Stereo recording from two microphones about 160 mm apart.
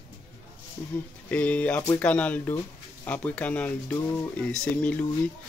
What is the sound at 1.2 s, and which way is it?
Speech, 10° left (ahead or behind).